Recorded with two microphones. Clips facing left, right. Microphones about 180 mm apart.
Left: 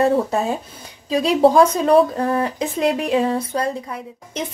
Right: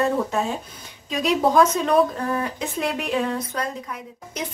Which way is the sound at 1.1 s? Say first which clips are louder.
Left 6 dB; 30° left (ahead or behind).